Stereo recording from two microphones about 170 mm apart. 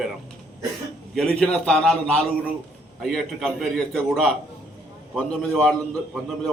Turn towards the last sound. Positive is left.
turn(degrees=5)  # may be behind; listen again after turning